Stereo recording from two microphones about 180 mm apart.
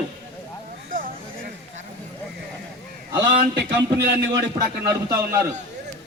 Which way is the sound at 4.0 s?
70° right (ahead or behind).